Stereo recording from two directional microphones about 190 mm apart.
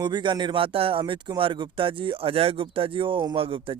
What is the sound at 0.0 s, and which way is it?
Speech, 25° right (ahead or behind).